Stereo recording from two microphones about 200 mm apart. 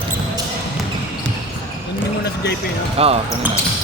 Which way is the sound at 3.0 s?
30° right (ahead or behind).